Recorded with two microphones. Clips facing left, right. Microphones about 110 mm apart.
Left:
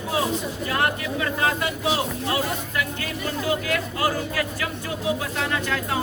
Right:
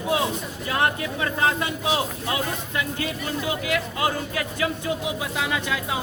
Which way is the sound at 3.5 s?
20° right (ahead or behind).